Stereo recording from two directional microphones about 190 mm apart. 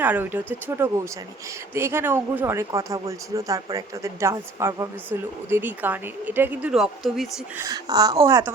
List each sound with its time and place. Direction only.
0.0 s speech: 10° right (ahead or behind)
7.6 s speech: 20° right (ahead or behind)